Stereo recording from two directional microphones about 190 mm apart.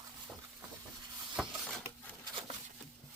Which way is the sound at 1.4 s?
Centre (ahead or behind).